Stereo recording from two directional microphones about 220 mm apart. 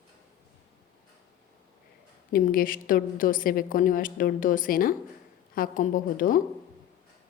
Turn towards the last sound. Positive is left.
turn(degrees=40)  # may be behind; listen again after turning